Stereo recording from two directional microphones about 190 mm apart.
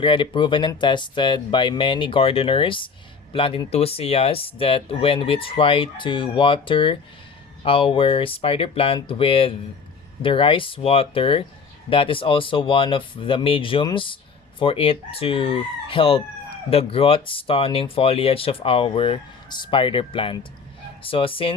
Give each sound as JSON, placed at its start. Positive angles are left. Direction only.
{"t": 0.0, "sound": "speech", "side_deg": 25}